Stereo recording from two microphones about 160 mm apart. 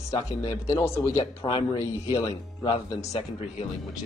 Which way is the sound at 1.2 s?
30° left (ahead or behind).